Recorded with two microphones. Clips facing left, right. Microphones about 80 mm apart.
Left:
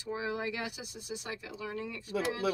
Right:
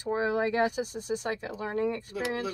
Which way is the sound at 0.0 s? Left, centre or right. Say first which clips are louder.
Right 8 dB; right.